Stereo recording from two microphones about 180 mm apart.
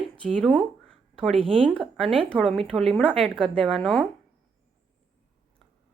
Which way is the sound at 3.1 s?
30° right (ahead or behind).